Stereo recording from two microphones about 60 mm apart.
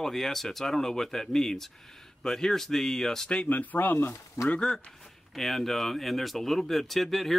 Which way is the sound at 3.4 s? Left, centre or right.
Left.